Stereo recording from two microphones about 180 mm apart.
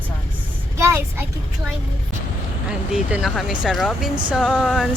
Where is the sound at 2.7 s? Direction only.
5° right (ahead or behind).